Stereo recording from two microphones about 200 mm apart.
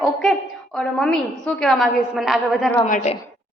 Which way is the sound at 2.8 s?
35° left (ahead or behind).